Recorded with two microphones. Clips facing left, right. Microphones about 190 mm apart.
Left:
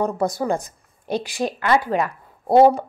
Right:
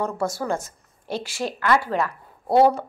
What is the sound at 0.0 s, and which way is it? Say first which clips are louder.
A woman's voice: left 4 dB; 15° left (ahead or behind).